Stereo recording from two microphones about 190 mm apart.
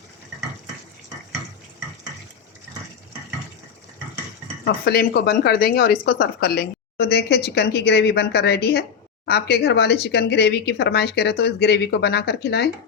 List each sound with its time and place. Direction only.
4.6 s a woman's voice: 60° left (ahead or behind)